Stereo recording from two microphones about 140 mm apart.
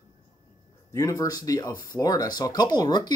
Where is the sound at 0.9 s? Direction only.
25° left (ahead or behind).